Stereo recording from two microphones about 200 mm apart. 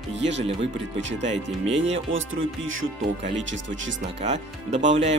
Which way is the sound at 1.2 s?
35° right (ahead or behind).